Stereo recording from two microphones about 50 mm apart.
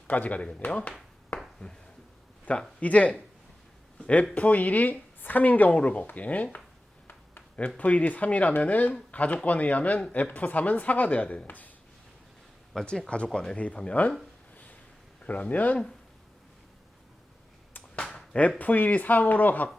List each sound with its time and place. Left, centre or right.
0.1 s speech: left
2.5 s speech: left
7.8 s speech: left
12.8 s speech: centre
14.5 s a sound: left
15.2 s speech: left
17.9 s a sound: left
18.6 s speech: left